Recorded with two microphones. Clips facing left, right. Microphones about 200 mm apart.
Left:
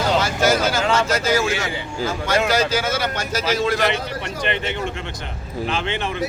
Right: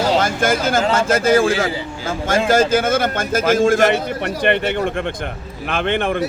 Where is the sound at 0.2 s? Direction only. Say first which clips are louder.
Right 1 dB; 50° right (ahead or behind).